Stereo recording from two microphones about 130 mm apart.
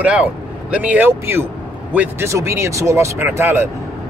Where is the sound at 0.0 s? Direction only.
10° right (ahead or behind).